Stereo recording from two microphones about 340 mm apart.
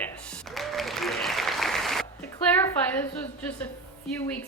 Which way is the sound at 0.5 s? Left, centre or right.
Centre.